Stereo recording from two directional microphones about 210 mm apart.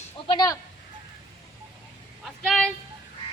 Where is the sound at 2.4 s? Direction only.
Centre (ahead or behind).